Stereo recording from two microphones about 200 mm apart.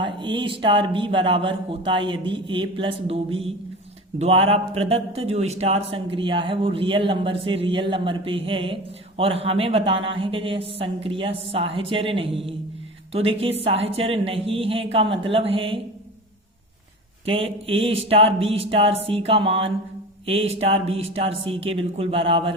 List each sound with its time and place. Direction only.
0.0 s a man's voice: 25° right (ahead or behind)
17.2 s a man's voice: 30° right (ahead or behind)